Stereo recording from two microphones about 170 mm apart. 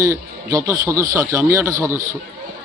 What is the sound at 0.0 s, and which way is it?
Speech, 20° right (ahead or behind).